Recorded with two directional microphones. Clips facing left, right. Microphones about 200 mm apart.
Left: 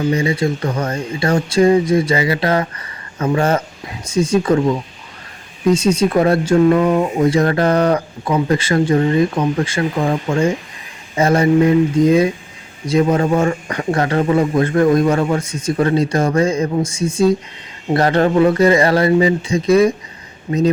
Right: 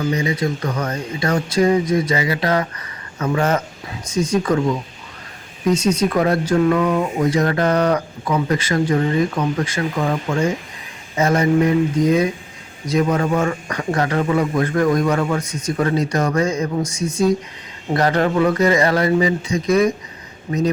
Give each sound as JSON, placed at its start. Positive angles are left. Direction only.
{"t": 0.0, "sound": "speech", "side_deg": 30}
{"t": 5.7, "sound": "speech", "side_deg": 30}
{"t": 12.9, "sound": "speech", "side_deg": 30}